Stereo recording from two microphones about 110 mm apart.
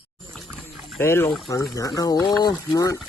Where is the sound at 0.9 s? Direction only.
20° left (ahead or behind).